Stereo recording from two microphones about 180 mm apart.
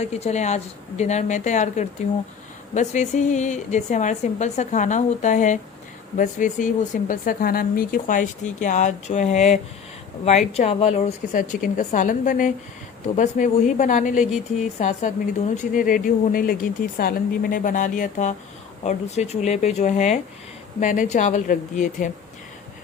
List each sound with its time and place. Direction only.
0.0 s a woman's voice: 35° left (ahead or behind)